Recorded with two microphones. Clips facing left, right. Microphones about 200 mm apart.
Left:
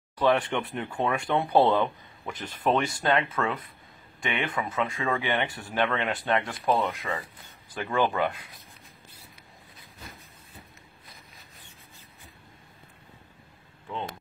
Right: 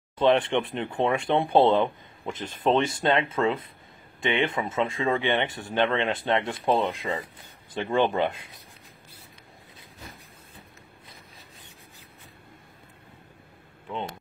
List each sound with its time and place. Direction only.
0.2 s speech: 25° right (ahead or behind)